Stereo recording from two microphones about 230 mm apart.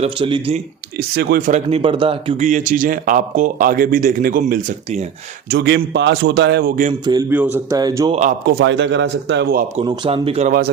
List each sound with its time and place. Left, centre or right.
0.0 s speech: right
1.1 s a man's voice: right
1.5 s a man's voice: right
5.5 s a man's voice: right
7.0 s speech: centre
8.1 s a man's voice: right
9.7 s speech: centre